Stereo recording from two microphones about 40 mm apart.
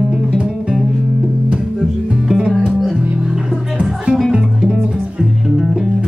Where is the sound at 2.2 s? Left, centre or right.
Centre.